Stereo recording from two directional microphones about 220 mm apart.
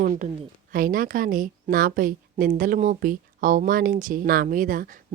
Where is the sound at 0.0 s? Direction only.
35° right (ahead or behind).